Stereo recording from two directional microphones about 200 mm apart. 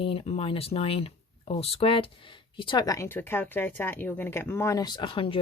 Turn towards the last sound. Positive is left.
turn(degrees=25)  # may be behind; listen again after turning